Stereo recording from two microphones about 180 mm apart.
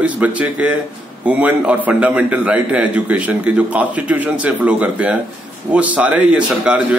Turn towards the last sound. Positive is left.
turn(degrees=-5)  # may be behind; listen again after turning